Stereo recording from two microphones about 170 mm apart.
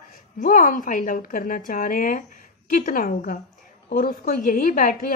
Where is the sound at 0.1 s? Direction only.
50° left (ahead or behind).